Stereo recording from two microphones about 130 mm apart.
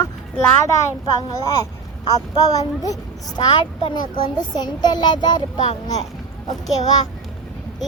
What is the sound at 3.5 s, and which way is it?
Speech, 45° left (ahead or behind).